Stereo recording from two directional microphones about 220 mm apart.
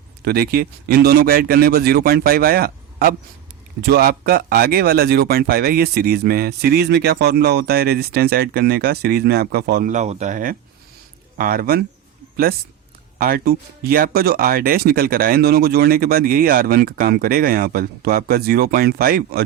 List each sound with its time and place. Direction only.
0.3 s speech: 45° right (ahead or behind)
13.1 s speech: 40° right (ahead or behind)